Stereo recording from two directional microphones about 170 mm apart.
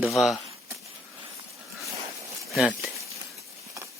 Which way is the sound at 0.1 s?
Centre (ahead or behind).